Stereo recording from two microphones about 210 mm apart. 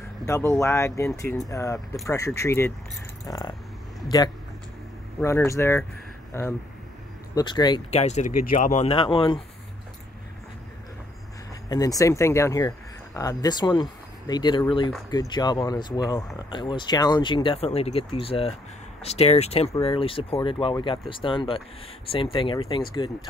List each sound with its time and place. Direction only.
0.2 s speech: 10° left (ahead or behind)
11.7 s speech: 15° left (ahead or behind)